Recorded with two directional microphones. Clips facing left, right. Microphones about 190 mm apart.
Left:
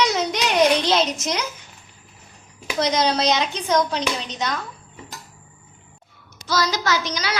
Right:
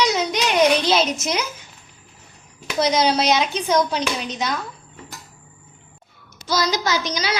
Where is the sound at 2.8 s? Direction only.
5° right (ahead or behind).